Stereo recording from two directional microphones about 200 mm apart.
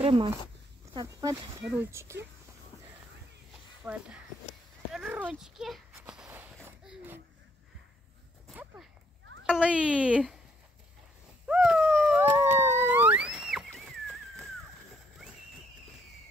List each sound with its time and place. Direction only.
0.0 s speech: 30° right (ahead or behind)
0.9 s speech: 15° right (ahead or behind)
3.8 s speech: 5° right (ahead or behind)
4.9 s walk: 5° right (ahead or behind)
8.5 s a sound: 5° right (ahead or behind)
9.8 s speech: 5° right (ahead or behind)
11.4 s dog: 5° right (ahead or behind)